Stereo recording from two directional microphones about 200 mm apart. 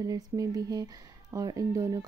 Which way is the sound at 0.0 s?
20° right (ahead or behind).